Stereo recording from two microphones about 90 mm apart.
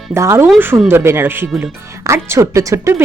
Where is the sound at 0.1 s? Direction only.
30° right (ahead or behind).